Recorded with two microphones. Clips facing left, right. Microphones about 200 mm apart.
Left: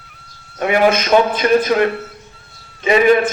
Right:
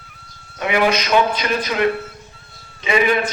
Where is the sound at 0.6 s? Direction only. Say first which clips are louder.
Left 4 dB; 50° left (ahead or behind).